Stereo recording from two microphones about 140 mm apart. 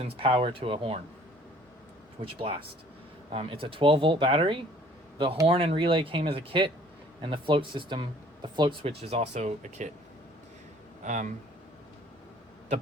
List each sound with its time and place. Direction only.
0.0 s speech: 40° right (ahead or behind)
2.2 s speech: 40° right (ahead or behind); by 9.9 s 55° right (ahead or behind)
11.0 s speech: 60° right (ahead or behind)